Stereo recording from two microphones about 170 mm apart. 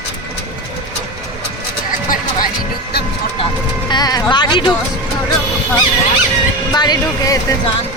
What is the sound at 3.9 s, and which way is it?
Music, 25° left (ahead or behind).